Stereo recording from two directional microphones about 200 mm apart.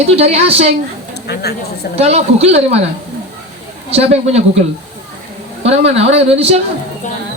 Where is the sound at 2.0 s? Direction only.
30° right (ahead or behind).